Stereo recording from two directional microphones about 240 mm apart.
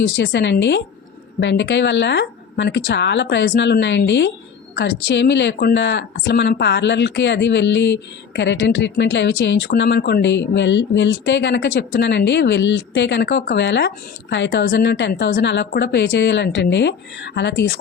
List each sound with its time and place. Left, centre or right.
0.2 s speech: left